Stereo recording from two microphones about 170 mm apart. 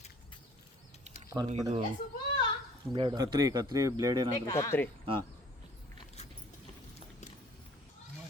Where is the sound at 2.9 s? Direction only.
25° right (ahead or behind).